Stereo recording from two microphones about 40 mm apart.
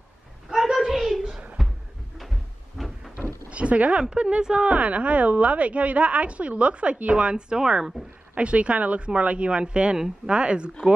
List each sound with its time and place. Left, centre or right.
0.5 s a sound: centre
2.8 s cupboard open or close: centre
3.4 s a sound: right
4.0 s a woman's voice: right
8.4 s speech: right
9.9 s speech: centre
10.3 s speech: right